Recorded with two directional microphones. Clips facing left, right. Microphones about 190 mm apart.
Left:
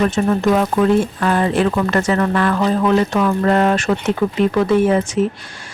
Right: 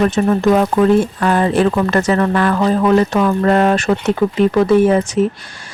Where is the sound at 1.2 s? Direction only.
40° right (ahead or behind).